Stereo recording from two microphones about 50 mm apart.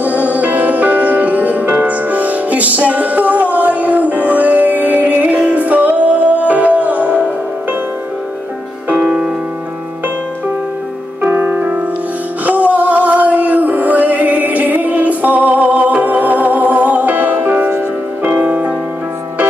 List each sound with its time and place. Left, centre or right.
0.0 s music: right
8.8 s music: right
11.2 s music: right
12.4 s music: right